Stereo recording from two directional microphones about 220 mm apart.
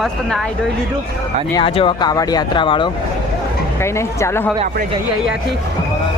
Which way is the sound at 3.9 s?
10° left (ahead or behind).